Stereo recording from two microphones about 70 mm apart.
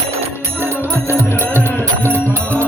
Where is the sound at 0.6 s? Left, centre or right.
Right.